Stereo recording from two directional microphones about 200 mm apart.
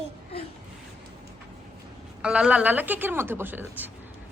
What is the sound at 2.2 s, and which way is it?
A woman's voice, 5° right (ahead or behind).